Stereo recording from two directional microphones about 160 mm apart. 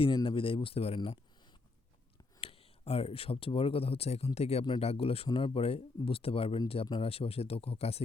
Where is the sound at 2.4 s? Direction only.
35° left (ahead or behind).